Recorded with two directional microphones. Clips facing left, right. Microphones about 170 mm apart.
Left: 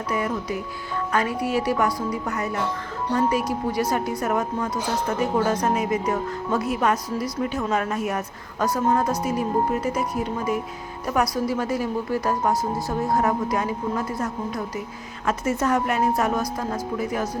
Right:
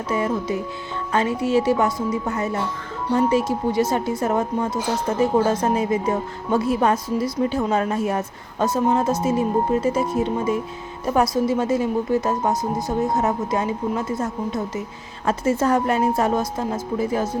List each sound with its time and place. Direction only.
0.1 s speech: 25° right (ahead or behind)